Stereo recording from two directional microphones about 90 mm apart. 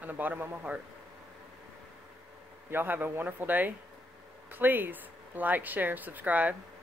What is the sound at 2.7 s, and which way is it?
Speech, 20° right (ahead or behind).